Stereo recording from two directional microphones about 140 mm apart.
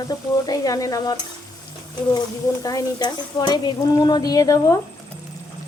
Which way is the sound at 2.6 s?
30° left (ahead or behind).